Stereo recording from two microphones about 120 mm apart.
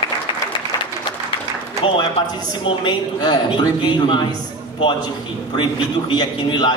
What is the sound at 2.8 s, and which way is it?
A man's voice, 35° left (ahead or behind).